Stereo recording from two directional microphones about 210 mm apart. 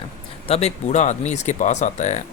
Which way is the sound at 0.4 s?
30° left (ahead or behind).